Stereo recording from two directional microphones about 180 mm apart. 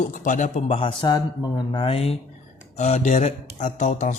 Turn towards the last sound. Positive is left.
turn(degrees=40)  # may be behind; listen again after turning